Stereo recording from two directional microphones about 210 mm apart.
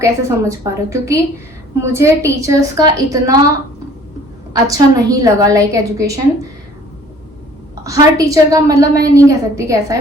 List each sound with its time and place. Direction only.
0.0 s a woman's voice: 15° right (ahead or behind)
4.5 s a woman's voice: 15° right (ahead or behind)
7.9 s a woman's voice: 15° right (ahead or behind)